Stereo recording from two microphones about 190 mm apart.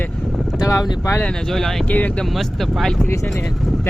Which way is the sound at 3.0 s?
15° left (ahead or behind).